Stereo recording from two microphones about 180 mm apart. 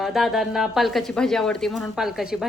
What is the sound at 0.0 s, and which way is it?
A woman's voice, centre (ahead or behind).